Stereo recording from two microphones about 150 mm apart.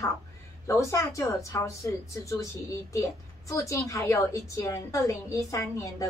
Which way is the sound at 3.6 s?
20° left (ahead or behind).